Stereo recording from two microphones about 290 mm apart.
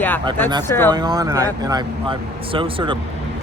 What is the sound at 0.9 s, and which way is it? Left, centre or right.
Speech, centre.